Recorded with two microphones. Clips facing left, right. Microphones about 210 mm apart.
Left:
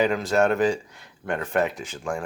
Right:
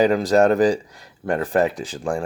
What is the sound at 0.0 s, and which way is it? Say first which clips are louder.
Speech: right 5 dB; 35° right (ahead or behind).